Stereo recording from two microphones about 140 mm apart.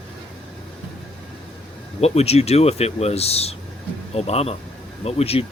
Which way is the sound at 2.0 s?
50° left (ahead or behind).